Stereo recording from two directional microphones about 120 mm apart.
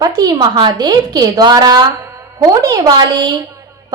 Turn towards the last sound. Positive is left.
turn(degrees=-35)  # may be behind; listen again after turning